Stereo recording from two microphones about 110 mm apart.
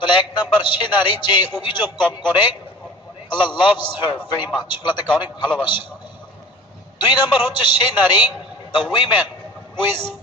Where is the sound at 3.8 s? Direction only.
45° left (ahead or behind).